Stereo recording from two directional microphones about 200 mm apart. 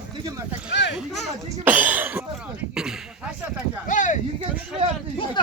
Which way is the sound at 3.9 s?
40° left (ahead or behind).